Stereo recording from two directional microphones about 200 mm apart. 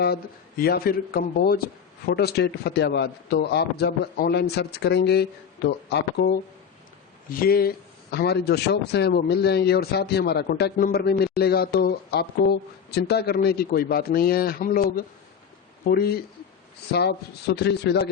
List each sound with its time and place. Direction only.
0.6 s a man's voice: 50° left (ahead or behind)